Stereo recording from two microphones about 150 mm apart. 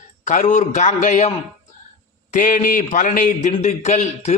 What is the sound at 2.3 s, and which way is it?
A man's voice, 65° left (ahead or behind).